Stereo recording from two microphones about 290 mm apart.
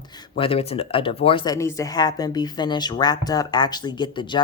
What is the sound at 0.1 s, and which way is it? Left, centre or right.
Speech, centre.